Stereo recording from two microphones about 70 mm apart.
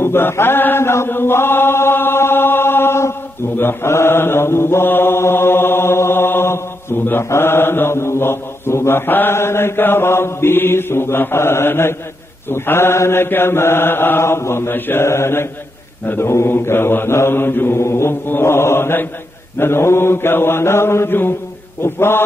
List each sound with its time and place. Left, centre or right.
0.0 s chant: left
7.1 s mantra: left